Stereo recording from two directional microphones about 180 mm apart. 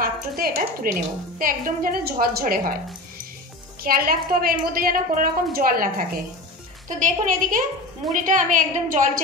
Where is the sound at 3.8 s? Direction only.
55° right (ahead or behind).